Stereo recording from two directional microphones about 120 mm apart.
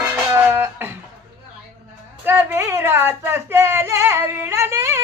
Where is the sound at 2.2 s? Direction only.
20° right (ahead or behind).